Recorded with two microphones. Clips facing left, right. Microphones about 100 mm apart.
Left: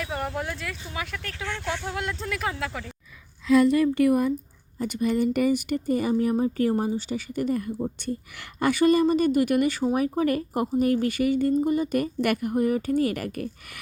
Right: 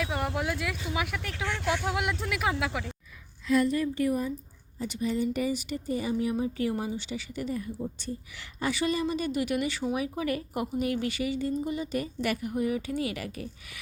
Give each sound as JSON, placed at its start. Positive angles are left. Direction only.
{"t": 0.0, "sound": "speech", "side_deg": -5}
{"t": 3.5, "sound": "speech", "side_deg": 85}
{"t": 4.8, "sound": "speech", "side_deg": 55}